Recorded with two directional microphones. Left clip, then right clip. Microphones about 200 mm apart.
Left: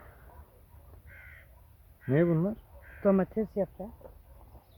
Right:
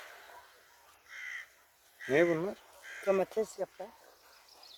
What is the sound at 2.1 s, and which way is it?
Speech, 15° right (ahead or behind).